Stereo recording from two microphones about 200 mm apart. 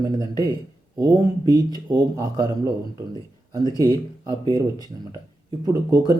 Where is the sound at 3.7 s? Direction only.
20° right (ahead or behind).